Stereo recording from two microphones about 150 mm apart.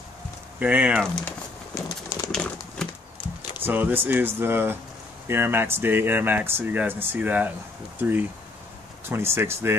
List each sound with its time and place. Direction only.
0.6 s speech: 10° right (ahead or behind)
1.9 s pigeon: 20° left (ahead or behind)
2.3 s a sound: 5° left (ahead or behind)
3.5 s speech: 15° right (ahead or behind)